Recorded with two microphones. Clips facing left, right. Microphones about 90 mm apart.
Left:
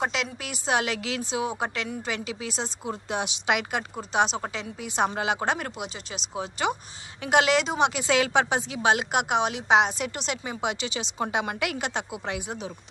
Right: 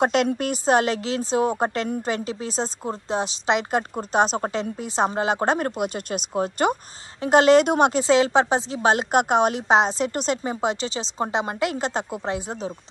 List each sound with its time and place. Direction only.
0.0 s speech: 50° right (ahead or behind)
7.6 s speech: 55° right (ahead or behind)
7.9 s speech: 30° right (ahead or behind)